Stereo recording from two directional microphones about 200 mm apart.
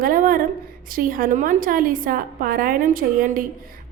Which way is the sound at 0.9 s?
45° right (ahead or behind).